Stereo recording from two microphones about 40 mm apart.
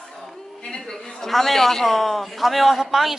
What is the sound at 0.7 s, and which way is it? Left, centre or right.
A man's voice, centre.